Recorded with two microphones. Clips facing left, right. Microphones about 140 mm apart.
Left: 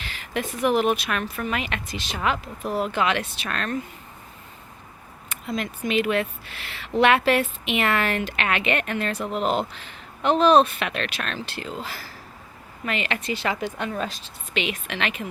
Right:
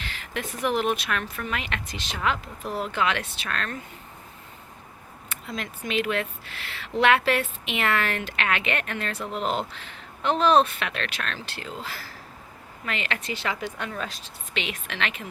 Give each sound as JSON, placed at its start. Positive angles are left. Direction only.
{"t": 0.0, "sound": "speech", "side_deg": 10}
{"t": 5.3, "sound": "speech", "side_deg": 15}